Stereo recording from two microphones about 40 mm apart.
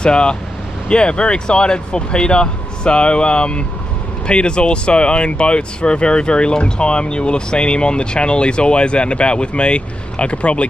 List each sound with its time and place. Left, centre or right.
0.0 s speech: left